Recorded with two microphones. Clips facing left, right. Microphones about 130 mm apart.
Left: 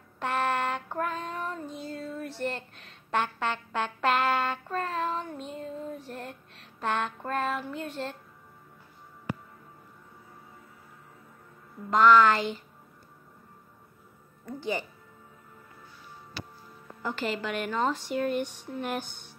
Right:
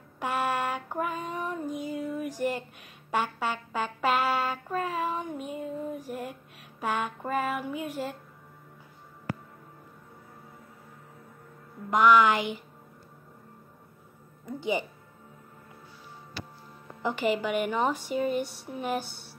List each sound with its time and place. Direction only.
0.2 s child singing: 10° right (ahead or behind)
11.9 s speech: 15° right (ahead or behind)
14.4 s music: 20° right (ahead or behind)
17.0 s speech: 15° right (ahead or behind)